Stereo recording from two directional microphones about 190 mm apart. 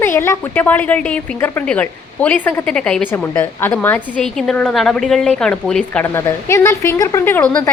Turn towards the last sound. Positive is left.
turn(degrees=10)  # may be behind; listen again after turning